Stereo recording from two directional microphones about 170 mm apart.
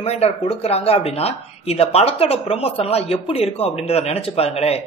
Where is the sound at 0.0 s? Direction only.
35° left (ahead or behind).